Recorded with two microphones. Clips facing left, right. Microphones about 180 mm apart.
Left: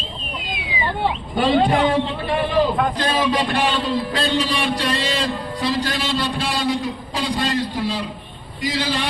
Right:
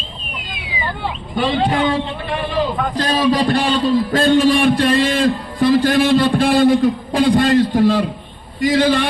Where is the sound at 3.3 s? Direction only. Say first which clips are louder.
Right 4 dB; 40° right (ahead or behind).